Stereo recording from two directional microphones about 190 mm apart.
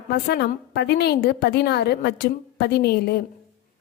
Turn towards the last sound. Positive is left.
turn(degrees=55)  # may be behind; listen again after turning